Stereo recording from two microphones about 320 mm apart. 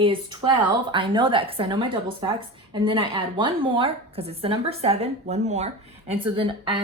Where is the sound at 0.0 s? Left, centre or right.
Centre.